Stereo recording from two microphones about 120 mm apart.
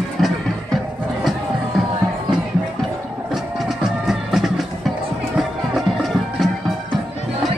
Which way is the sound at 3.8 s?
5° right (ahead or behind).